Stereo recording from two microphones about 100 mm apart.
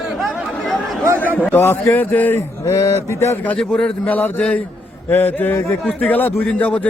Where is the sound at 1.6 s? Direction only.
25° left (ahead or behind).